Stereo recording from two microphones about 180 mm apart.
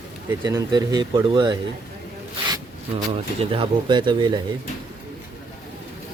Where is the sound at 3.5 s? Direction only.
30° right (ahead or behind).